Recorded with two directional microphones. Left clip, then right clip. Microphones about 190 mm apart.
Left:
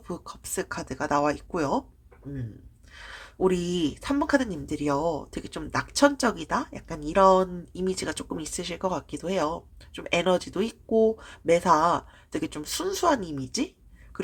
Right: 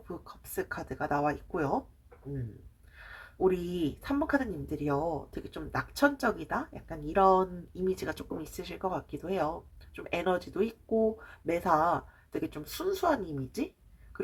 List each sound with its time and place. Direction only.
0.3 s speech: 35° left (ahead or behind)
3.0 s speech: 40° left (ahead or behind)